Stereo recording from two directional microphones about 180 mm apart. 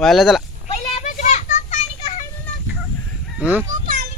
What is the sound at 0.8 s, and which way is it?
Children playing, 35° left (ahead or behind).